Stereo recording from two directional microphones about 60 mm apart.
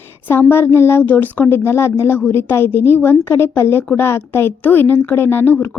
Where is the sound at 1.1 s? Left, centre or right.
Left.